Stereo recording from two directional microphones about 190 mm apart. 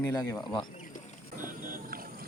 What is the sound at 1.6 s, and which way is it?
Boat, 45° right (ahead or behind).